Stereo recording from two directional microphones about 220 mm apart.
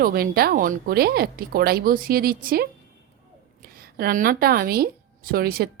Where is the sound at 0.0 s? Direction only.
45° right (ahead or behind).